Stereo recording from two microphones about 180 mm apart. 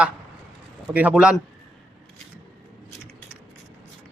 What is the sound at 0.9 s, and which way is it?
Speech, 5° right (ahead or behind).